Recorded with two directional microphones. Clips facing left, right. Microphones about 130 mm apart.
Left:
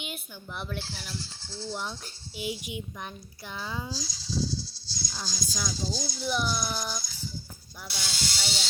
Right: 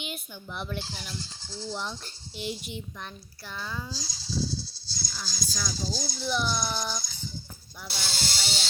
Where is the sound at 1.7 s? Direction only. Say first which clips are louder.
Right 1 dB; 10° left (ahead or behind).